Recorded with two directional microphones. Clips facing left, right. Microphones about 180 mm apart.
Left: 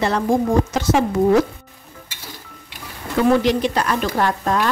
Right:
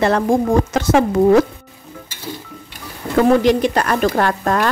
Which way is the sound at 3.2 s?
50° right (ahead or behind).